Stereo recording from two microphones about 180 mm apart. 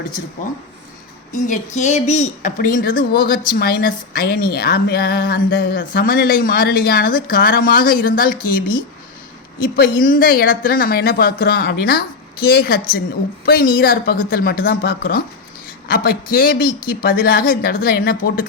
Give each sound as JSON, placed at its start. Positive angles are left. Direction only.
{"t": 1.3, "sound": "a woman's voice", "side_deg": 45}